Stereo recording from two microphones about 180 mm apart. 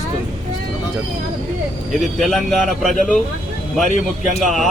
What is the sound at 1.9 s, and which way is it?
Speech, centre (ahead or behind).